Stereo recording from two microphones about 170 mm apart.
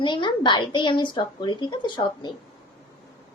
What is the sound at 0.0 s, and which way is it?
A woman's voice, 25° left (ahead or behind).